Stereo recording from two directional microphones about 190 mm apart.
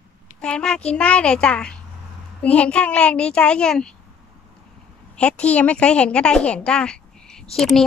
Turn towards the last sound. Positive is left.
turn(degrees=0)  # may be behind; listen again after turning